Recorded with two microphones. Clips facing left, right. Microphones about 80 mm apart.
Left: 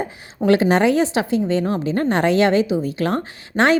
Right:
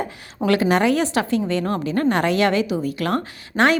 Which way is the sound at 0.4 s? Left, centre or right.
Left.